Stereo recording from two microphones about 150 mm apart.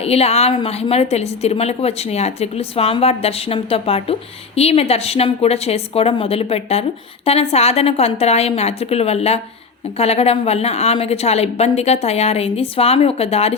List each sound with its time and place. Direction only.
0.0 s a woman's voice: 45° left (ahead or behind)